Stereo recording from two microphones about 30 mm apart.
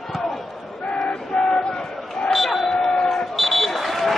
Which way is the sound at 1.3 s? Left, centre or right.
Left.